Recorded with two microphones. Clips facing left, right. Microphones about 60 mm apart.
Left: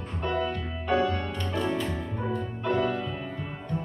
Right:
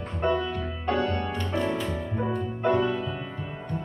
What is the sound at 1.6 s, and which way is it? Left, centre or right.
Music, centre.